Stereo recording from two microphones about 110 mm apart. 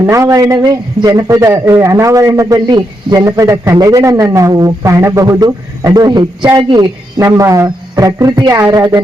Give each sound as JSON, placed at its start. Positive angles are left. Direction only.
{"t": 0.0, "sound": "a man's voice", "side_deg": -30}
{"t": 7.3, "sound": "a man's voice", "side_deg": -30}